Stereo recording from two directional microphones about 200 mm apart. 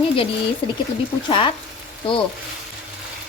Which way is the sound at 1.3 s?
25° left (ahead or behind).